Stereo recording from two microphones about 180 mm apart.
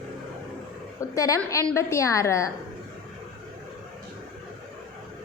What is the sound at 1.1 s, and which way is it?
A woman's voice, 20° left (ahead or behind).